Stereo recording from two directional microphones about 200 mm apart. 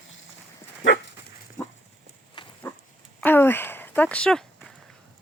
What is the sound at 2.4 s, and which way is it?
Dog, 20° left (ahead or behind).